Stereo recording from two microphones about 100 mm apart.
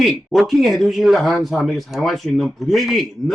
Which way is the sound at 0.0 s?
Centre (ahead or behind).